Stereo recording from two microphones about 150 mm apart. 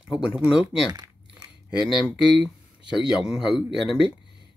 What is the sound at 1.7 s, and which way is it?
Speech, 5° right (ahead or behind).